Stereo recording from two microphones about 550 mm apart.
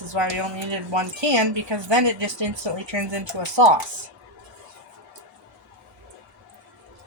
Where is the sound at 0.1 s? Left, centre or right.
Right.